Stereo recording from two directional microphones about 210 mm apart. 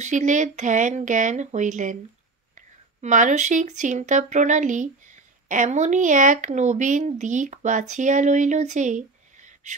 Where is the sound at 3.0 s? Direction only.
35° right (ahead or behind).